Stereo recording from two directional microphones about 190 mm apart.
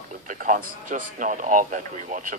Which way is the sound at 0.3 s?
45° right (ahead or behind).